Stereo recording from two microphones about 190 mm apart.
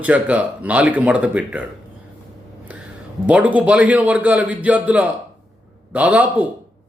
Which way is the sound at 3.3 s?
5° right (ahead or behind).